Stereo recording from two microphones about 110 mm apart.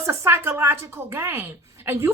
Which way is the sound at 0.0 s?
25° right (ahead or behind).